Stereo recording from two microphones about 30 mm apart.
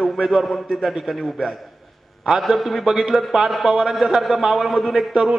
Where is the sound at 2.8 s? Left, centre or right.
Centre.